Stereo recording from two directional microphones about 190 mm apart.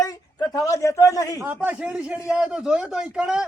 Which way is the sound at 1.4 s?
10° right (ahead or behind).